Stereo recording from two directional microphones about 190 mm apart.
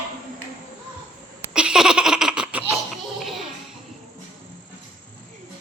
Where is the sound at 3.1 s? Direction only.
Centre (ahead or behind).